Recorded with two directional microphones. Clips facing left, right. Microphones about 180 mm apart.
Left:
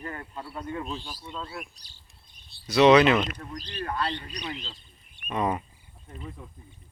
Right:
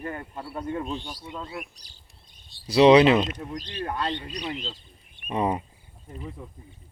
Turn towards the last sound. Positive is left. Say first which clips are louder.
# right 2 dB
turn(degrees=-30)  # may be behind; listen again after turning